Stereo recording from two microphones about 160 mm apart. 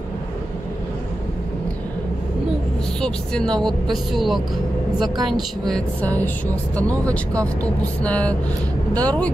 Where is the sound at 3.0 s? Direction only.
5° left (ahead or behind).